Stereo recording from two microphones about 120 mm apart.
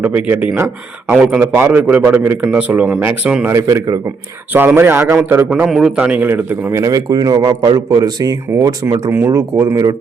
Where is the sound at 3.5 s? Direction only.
25° right (ahead or behind).